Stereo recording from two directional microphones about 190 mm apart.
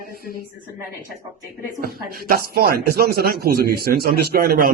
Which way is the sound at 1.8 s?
50° right (ahead or behind).